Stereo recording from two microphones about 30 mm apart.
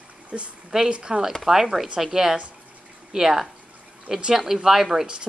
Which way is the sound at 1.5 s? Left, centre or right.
Centre.